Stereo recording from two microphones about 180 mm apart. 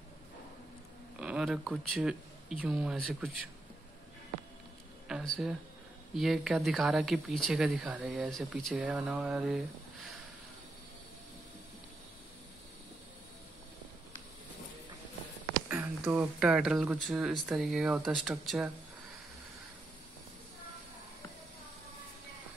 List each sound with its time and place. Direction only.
1.2 s speech: 5° right (ahead or behind)
5.0 s a sound: centre (ahead or behind)
6.1 s speech: centre (ahead or behind)
15.7 s speech: 10° right (ahead or behind)